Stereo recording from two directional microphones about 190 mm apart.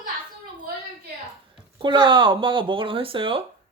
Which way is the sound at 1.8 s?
25° right (ahead or behind).